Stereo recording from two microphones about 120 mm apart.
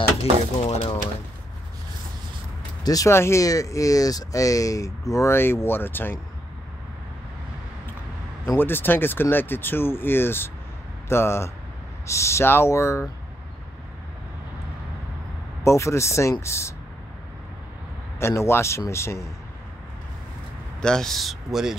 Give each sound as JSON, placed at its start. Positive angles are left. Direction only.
{"t": 0.2, "sound": "a sound", "side_deg": 65}
{"t": 2.8, "sound": "speech", "side_deg": 30}
{"t": 8.5, "sound": "speech", "side_deg": 15}
{"t": 15.6, "sound": "speech", "side_deg": 25}
{"t": 18.2, "sound": "speech", "side_deg": 20}
{"t": 20.8, "sound": "speech", "side_deg": 5}